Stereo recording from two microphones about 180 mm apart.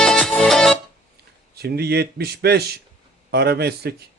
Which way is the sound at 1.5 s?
60° right (ahead or behind).